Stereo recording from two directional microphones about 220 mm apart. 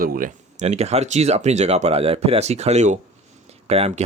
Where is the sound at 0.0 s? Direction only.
40° right (ahead or behind).